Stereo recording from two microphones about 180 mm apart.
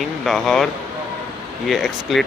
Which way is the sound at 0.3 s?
Centre (ahead or behind).